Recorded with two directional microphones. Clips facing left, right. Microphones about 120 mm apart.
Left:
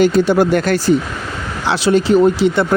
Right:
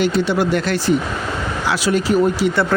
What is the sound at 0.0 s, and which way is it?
Speech, 45° left (ahead or behind).